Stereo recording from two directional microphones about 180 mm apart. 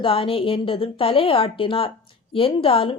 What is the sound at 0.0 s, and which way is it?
A woman's voice, 30° left (ahead or behind).